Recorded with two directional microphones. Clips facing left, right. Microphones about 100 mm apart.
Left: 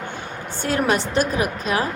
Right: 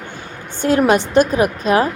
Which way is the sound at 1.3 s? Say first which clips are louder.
Right 7 dB; 35° right (ahead or behind).